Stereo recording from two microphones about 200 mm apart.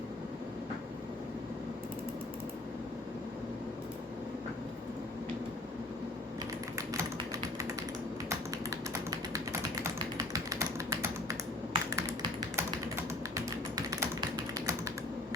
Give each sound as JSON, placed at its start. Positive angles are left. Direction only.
{"t": 8.3, "sound": "typing", "side_deg": -15}
{"t": 10.2, "sound": "computer keyboard", "side_deg": -15}
{"t": 13.3, "sound": "typing", "side_deg": -15}